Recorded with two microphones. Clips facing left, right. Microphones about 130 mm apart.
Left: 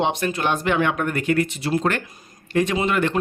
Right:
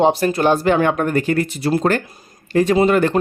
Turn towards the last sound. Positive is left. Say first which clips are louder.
# right 7 dB
turn(degrees=-40)  # may be behind; listen again after turning